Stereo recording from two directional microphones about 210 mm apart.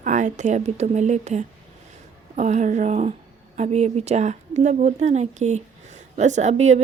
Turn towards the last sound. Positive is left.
turn(degrees=-30)  # may be behind; listen again after turning